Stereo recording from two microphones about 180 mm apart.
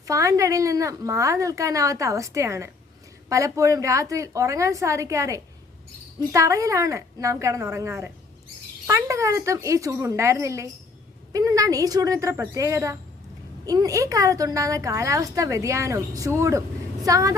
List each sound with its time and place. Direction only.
0.1 s a woman's voice: 15° right (ahead or behind)